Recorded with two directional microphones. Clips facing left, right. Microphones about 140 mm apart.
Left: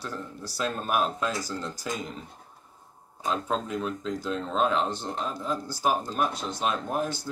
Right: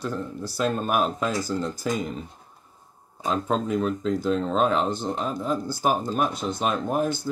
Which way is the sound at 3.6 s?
45° right (ahead or behind).